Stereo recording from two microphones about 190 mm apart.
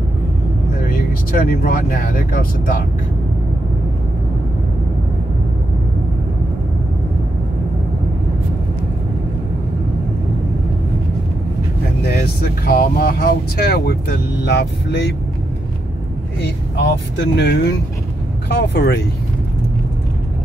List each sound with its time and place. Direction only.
0.8 s speech: 50° left (ahead or behind)
12.0 s speech: 55° left (ahead or behind)
17.2 s speech: 65° left (ahead or behind)